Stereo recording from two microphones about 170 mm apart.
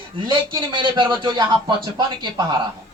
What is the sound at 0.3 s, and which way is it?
Speech, 30° right (ahead or behind).